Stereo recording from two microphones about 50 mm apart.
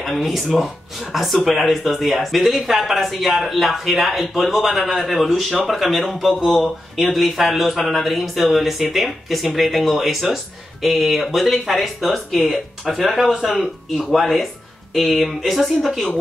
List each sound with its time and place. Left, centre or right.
0.0 s speech: centre